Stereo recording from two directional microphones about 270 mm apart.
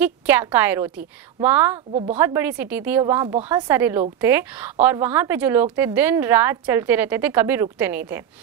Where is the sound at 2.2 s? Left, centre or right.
Centre.